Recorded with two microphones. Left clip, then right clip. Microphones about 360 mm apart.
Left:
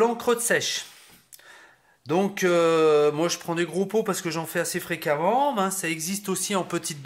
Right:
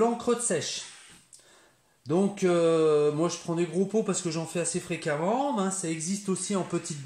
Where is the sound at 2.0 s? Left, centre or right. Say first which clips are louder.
Left 3 dB; left.